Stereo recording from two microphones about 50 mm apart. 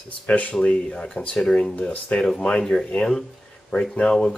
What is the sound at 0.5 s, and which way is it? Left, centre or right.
Speech, centre.